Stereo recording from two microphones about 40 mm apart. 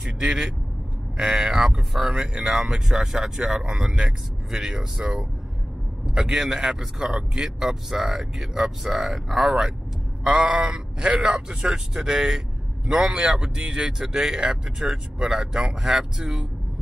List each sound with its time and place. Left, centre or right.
0.0 s vehicle: centre
1.1 s speech: centre
10.4 s sheep: right
11.2 s speech: right